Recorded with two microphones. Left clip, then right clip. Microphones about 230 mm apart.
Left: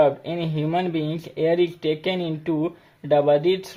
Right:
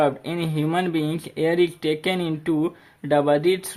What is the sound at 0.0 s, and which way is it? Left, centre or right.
Speech, right.